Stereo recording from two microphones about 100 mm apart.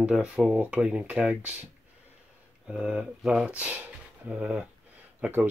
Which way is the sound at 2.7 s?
10° right (ahead or behind).